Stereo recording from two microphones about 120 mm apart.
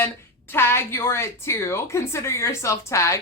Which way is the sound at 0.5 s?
20° left (ahead or behind).